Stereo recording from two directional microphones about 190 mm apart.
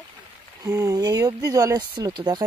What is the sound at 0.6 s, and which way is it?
Speech, 15° right (ahead or behind).